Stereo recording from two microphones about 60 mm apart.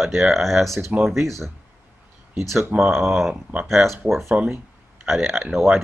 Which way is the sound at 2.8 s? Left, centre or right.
Centre.